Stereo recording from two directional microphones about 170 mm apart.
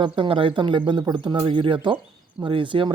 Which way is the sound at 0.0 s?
30° right (ahead or behind).